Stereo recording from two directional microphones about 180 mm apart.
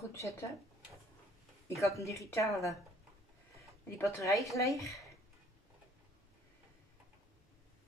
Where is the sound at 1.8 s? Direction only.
15° left (ahead or behind).